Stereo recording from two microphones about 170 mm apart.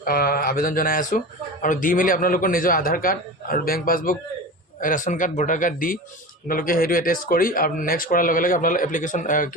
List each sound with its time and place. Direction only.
0.0 s a man's voice: 60° left (ahead or behind)